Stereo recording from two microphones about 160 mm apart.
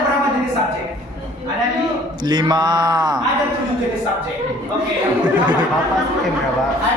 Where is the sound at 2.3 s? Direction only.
30° right (ahead or behind).